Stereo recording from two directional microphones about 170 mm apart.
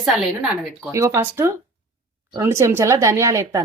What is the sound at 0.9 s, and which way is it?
Speech, 15° right (ahead or behind).